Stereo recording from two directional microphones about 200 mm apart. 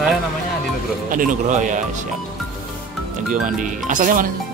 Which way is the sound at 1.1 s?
40° right (ahead or behind).